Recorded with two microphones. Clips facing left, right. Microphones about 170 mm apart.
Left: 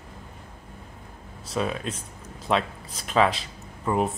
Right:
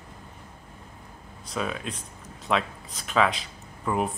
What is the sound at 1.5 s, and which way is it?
Speech, 35° left (ahead or behind).